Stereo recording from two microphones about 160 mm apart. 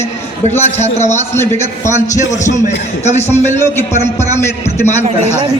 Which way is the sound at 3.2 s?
15° left (ahead or behind).